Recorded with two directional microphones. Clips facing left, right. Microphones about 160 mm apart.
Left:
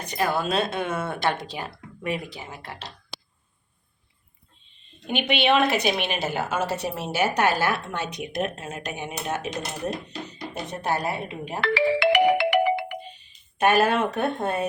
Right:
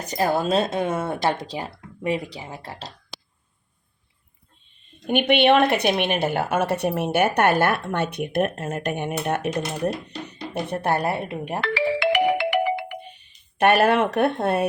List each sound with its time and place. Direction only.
0.0 s speech: 40° right (ahead or behind)
5.0 s a woman's voice: 55° right (ahead or behind)
11.6 s music: 75° left (ahead or behind)
13.1 s speech: 60° right (ahead or behind)